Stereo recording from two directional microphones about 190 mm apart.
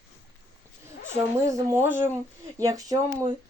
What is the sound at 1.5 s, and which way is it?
Speech, 15° right (ahead or behind).